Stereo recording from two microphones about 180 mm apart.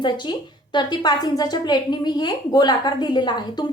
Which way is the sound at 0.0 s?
25° left (ahead or behind).